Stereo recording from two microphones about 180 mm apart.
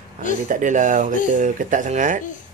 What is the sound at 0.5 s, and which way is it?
Speech, 45° right (ahead or behind).